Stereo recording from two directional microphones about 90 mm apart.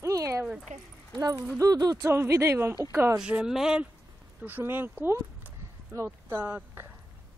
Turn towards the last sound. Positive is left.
turn(degrees=-25)  # may be behind; listen again after turning